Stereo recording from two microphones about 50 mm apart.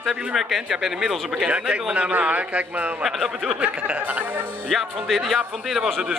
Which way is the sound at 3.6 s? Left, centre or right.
Right.